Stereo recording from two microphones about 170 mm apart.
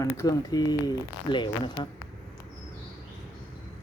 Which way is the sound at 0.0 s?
20° left (ahead or behind).